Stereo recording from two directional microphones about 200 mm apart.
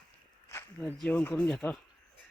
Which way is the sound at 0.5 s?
10° left (ahead or behind).